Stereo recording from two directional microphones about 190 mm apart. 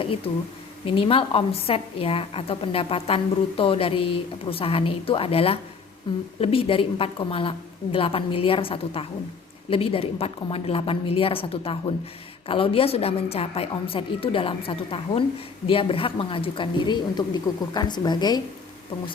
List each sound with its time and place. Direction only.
0.9 s a woman's voice: 30° left (ahead or behind)